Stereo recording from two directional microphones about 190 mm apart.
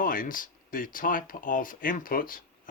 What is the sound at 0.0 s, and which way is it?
Speech, 45° left (ahead or behind).